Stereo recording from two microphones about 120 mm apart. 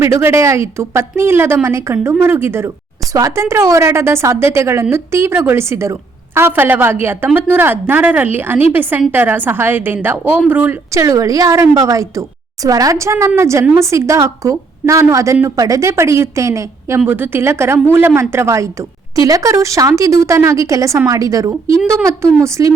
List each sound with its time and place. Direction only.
0.0 s a woman's voice: 20° right (ahead or behind)
10.9 s a woman's voice: 30° right (ahead or behind)